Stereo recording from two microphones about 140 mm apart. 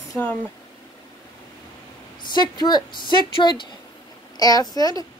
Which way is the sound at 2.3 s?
30° left (ahead or behind).